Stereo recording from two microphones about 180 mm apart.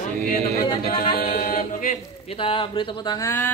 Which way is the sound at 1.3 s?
45° left (ahead or behind).